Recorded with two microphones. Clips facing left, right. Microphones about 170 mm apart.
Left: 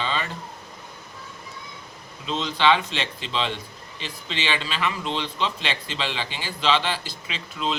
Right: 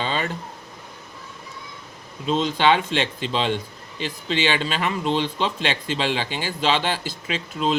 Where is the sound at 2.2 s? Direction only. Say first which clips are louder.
Right 3 dB; 45° right (ahead or behind).